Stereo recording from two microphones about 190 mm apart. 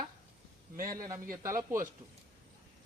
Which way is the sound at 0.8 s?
50° right (ahead or behind).